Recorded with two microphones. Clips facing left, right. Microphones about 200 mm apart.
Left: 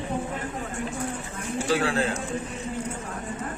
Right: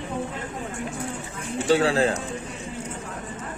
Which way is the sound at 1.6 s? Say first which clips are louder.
Right 5 dB; 30° right (ahead or behind).